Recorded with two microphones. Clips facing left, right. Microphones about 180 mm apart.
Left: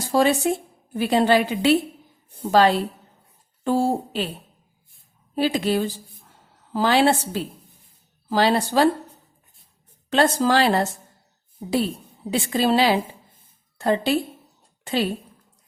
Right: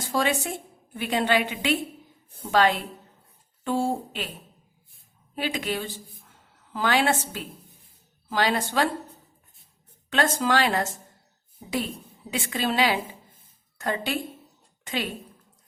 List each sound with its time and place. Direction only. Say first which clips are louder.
0.1 s speech: left 7 dB; 40° left (ahead or behind)
5.3 s a woman's voice: left 8 dB; 35° left (ahead or behind)
10.1 s speech: left 5 dB; 35° left (ahead or behind)
12.3 s a woman's voice: left 7 dB; 35° left (ahead or behind)